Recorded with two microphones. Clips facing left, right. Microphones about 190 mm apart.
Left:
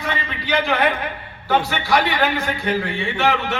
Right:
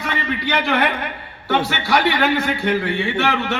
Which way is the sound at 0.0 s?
65° right (ahead or behind).